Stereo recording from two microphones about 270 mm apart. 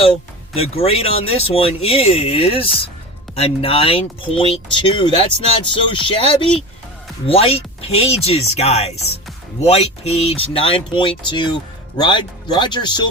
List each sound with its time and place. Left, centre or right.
0.5 s speech: left